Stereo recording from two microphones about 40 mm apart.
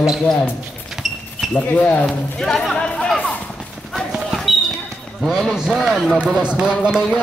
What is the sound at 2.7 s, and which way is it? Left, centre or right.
Chatter, left.